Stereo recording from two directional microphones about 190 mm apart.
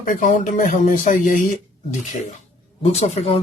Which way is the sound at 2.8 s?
35° left (ahead or behind).